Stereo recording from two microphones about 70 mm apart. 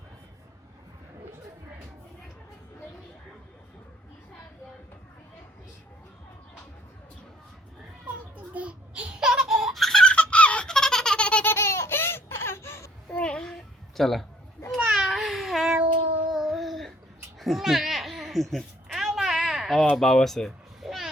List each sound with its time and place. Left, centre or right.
8.5 s laughter: centre
11.5 s a sound: left
13.1 s babbling: centre
16.3 s child singing: centre
17.4 s a sound: centre
19.8 s speech: centre